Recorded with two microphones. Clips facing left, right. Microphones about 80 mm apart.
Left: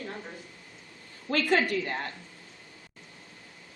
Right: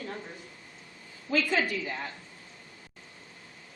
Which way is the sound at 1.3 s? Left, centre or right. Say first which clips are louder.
Left 2 dB; left.